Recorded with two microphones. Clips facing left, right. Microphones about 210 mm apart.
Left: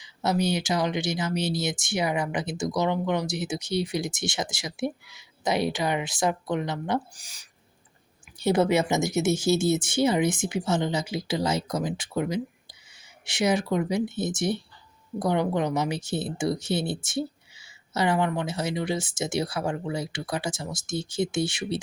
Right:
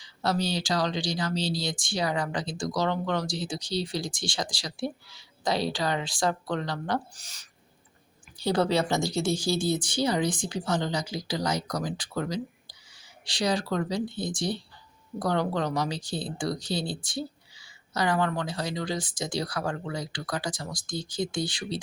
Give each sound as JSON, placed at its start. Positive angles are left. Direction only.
{"t": 0.0, "sound": "speech", "side_deg": 20}
{"t": 8.4, "sound": "speech", "side_deg": 20}